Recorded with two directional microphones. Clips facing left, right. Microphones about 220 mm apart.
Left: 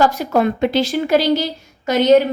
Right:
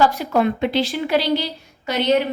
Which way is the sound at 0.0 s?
45° left (ahead or behind).